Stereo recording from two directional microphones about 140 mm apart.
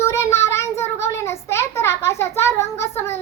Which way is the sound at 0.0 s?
20° left (ahead or behind).